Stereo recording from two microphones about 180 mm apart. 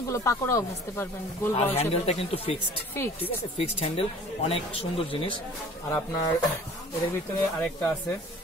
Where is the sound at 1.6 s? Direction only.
35° left (ahead or behind).